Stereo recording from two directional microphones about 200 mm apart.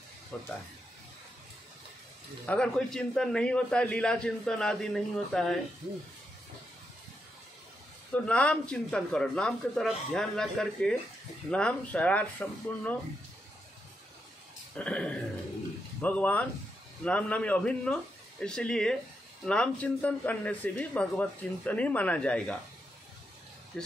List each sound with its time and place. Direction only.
0.3 s a man's voice: 5° left (ahead or behind)
2.4 s a man's voice: 5° left (ahead or behind)
8.1 s a man's voice: 5° left (ahead or behind)
14.8 s a man's voice: 5° left (ahead or behind)